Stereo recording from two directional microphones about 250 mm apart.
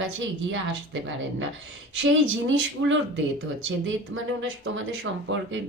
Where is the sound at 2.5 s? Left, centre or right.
Right.